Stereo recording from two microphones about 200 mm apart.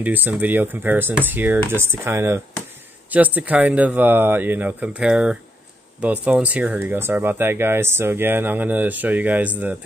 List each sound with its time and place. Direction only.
0.0 s speech: 10° right (ahead or behind)